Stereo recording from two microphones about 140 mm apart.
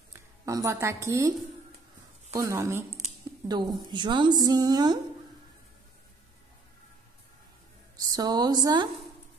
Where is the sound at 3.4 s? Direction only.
35° right (ahead or behind).